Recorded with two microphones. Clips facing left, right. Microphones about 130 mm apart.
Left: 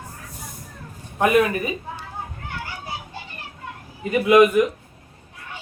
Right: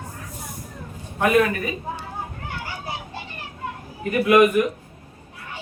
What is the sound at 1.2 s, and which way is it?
Speech, 15° left (ahead or behind).